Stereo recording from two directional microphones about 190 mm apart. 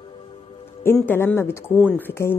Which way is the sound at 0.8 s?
10° left (ahead or behind).